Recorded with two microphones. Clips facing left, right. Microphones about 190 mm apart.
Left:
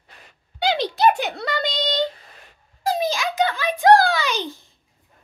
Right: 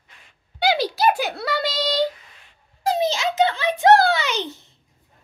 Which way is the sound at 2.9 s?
25° right (ahead or behind).